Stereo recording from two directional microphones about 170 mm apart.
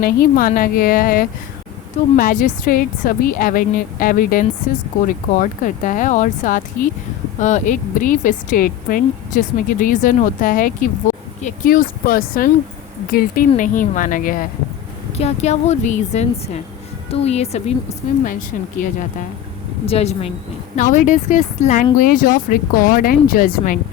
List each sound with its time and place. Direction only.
0.0 s a woman's voice: 55° left (ahead or behind)
15.2 s a woman's voice: 40° left (ahead or behind)
19.8 s a woman's voice: 35° left (ahead or behind)
20.7 s a woman's voice: 45° left (ahead or behind)